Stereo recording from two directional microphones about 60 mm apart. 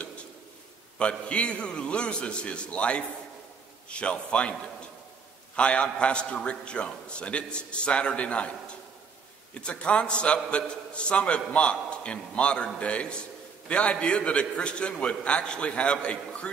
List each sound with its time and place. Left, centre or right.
0.9 s a man's voice: centre
5.6 s a man's voice: centre
9.5 s a man's voice: centre